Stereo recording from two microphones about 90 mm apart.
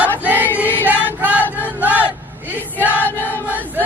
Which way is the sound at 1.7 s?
20° right (ahead or behind).